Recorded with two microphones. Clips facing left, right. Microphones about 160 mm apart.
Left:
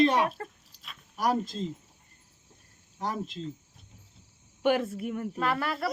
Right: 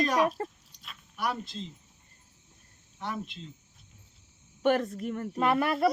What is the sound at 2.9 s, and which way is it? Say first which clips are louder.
Speech: left 3 dB; 40° left (ahead or behind).